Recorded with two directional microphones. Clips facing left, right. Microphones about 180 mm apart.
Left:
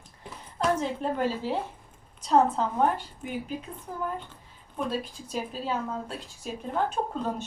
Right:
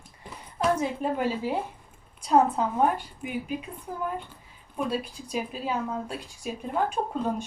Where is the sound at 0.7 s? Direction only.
15° right (ahead or behind).